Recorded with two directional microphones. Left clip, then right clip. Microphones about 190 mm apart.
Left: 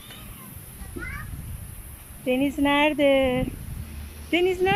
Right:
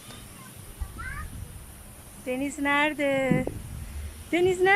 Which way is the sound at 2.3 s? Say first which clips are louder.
Left 4 dB; 15° left (ahead or behind).